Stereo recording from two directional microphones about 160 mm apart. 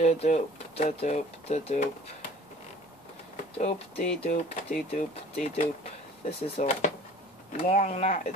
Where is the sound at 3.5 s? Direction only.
40° left (ahead or behind).